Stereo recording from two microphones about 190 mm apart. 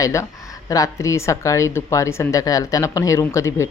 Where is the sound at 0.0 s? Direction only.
15° left (ahead or behind).